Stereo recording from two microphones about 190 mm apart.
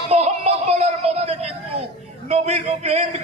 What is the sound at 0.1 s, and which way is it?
Music, 35° right (ahead or behind).